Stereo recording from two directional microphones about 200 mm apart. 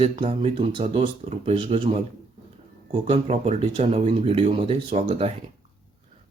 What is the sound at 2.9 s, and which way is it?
Speech, 30° right (ahead or behind).